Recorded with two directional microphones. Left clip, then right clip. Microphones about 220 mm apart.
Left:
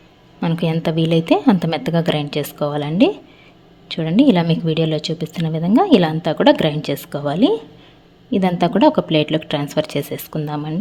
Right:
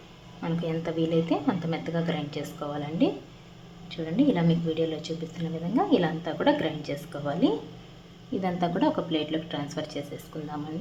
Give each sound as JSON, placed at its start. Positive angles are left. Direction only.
{"t": 0.4, "sound": "a woman's voice", "side_deg": 50}